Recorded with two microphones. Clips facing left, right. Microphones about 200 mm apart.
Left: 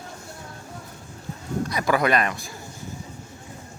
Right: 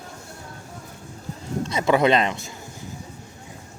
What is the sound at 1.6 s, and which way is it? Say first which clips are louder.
Speech: right 4 dB; 25° right (ahead or behind).